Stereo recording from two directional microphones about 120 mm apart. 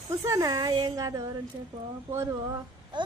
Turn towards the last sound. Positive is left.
turn(degrees=-40)  # may be behind; listen again after turning